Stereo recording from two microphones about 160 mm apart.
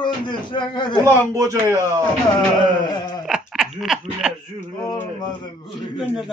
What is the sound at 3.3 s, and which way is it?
Sheep, 5° right (ahead or behind).